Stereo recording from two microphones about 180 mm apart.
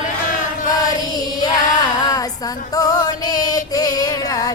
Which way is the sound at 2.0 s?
20° left (ahead or behind).